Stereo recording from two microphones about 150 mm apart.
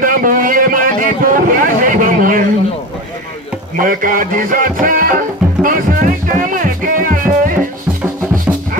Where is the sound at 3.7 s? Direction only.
65° right (ahead or behind).